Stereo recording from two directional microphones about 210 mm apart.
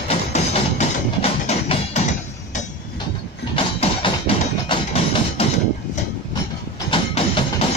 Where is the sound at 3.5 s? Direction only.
25° left (ahead or behind).